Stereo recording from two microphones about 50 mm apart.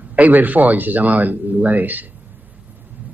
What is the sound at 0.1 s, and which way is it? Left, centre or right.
Speech, right.